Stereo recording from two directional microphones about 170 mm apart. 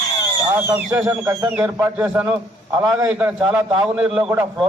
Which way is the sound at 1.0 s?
20° right (ahead or behind).